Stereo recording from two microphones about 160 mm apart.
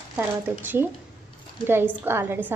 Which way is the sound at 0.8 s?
15° right (ahead or behind).